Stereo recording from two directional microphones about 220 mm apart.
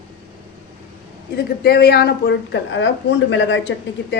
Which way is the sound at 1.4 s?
45° left (ahead or behind).